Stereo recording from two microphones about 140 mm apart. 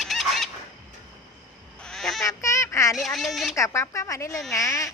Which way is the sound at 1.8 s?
Centre (ahead or behind).